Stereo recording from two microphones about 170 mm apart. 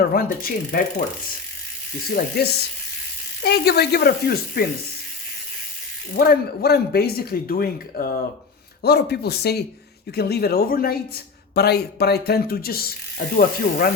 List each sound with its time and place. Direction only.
0.0 s speech: 60° left (ahead or behind)
2.1 s speech: 70° left (ahead or behind)
6.1 s speech: 60° left (ahead or behind)
8.8 s speech: 70° left (ahead or behind)